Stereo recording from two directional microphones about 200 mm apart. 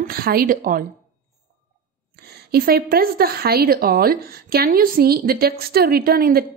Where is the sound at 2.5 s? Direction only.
50° right (ahead or behind).